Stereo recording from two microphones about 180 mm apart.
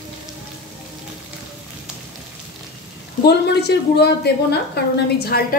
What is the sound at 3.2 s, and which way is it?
A woman's voice, 65° left (ahead or behind).